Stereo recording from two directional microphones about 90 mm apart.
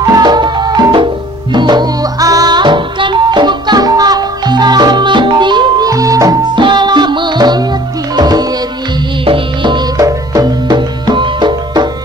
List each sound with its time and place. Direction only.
0.0 s music: 45° right (ahead or behind)
5.9 s music: 40° right (ahead or behind)
6.5 s music: 60° right (ahead or behind)
9.2 s music: 75° right (ahead or behind)
9.9 s music: 45° right (ahead or behind)